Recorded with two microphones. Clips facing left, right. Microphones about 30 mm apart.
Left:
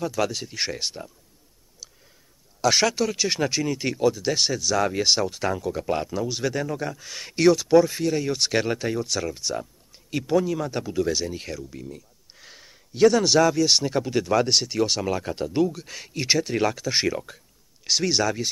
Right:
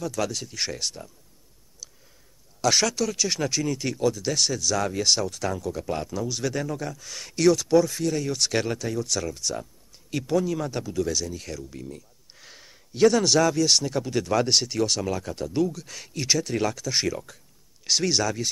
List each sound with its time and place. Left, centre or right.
0.0 s speech: centre
2.6 s speech: centre
8.7 s speech: left
11.7 s a sound: centre
13.7 s speech: centre
17.8 s speech: centre